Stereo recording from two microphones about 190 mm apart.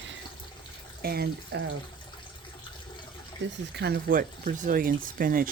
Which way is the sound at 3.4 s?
70° right (ahead or behind).